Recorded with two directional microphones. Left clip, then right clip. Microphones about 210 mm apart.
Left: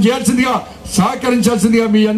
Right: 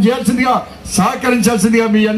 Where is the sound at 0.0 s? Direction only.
50° left (ahead or behind).